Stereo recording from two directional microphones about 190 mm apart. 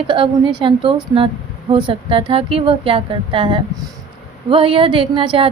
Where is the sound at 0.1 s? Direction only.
25° right (ahead or behind).